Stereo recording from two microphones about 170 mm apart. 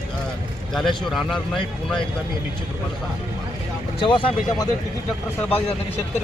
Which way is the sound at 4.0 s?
30° left (ahead or behind).